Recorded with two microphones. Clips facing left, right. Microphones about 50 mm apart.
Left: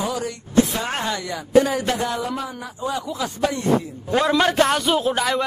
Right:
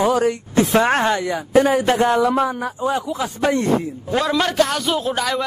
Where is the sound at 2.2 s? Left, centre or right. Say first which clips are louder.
Right 9 dB; right.